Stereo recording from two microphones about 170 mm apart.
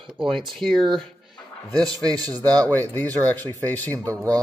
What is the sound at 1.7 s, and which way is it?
A man's voice, 20° right (ahead or behind).